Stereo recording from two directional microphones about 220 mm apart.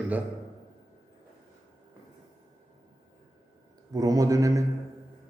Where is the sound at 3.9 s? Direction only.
15° right (ahead or behind).